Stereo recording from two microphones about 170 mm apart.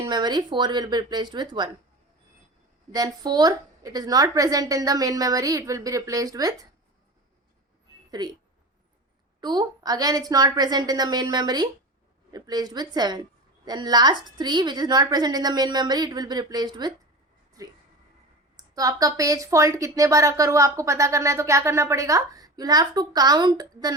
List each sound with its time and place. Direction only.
0.0 s a woman's voice: 25° right (ahead or behind)
2.9 s a woman's voice: 25° right (ahead or behind)
8.1 s a woman's voice: 25° right (ahead or behind)
9.4 s a woman's voice: 25° right (ahead or behind)
18.5 s a woman's voice: 20° right (ahead or behind)